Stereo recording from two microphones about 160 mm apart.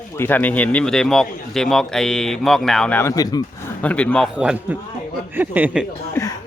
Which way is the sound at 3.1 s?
25° left (ahead or behind).